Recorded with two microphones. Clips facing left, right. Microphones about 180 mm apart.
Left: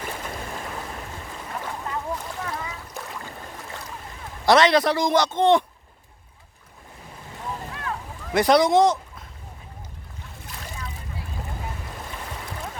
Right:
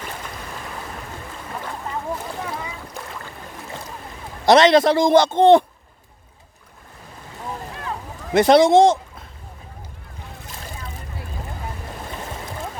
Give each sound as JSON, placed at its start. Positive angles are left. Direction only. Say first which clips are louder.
{"t": 2.4, "sound": "boat", "louder": "right 2 dB", "side_deg": -15}
{"t": 4.4, "sound": "speech", "louder": "right 4 dB", "side_deg": -25}
{"t": 7.8, "sound": "a sound", "louder": "right 2 dB", "side_deg": -25}